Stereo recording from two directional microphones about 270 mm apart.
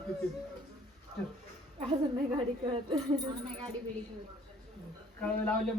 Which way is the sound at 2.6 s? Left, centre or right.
Centre.